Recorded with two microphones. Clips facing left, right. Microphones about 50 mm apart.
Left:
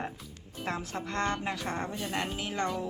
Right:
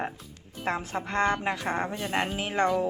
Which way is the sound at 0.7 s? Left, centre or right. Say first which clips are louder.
Right 5 dB; right.